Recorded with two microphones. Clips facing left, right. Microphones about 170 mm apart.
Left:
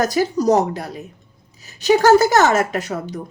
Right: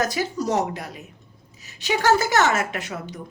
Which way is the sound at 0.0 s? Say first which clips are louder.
Left 7 dB; 40° left (ahead or behind).